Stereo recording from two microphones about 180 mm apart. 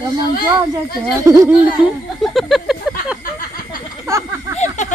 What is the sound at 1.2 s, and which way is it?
Laughter, 20° right (ahead or behind).